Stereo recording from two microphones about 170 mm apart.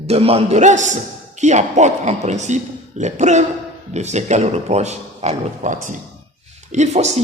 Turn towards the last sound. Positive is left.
turn(degrees=-40)  # may be behind; listen again after turning